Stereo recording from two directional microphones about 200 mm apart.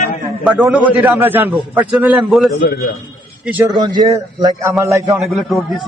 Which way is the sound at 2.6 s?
50° left (ahead or behind).